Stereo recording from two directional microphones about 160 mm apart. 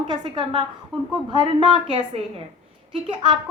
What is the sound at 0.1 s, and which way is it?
A woman's voice, 30° right (ahead or behind).